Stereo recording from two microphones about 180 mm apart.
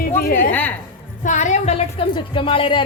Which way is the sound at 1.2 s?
45° left (ahead or behind).